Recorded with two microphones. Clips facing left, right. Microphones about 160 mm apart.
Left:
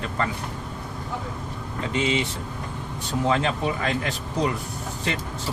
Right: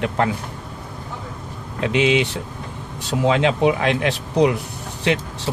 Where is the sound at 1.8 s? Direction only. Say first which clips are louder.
Right 7 dB; 85° right.